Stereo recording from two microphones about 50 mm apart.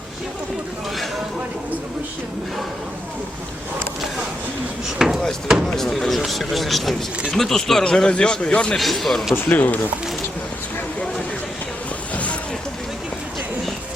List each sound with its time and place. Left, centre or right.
4.9 s speech: centre
5.6 s speech: centre
8.7 s speech: centre
9.3 s speech: left
12.1 s a sound: left